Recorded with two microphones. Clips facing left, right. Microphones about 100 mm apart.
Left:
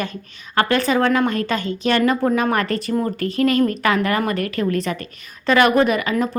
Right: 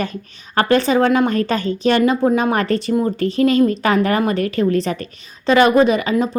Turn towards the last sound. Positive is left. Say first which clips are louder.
# right 3 dB
turn(degrees=-25)  # may be behind; listen again after turning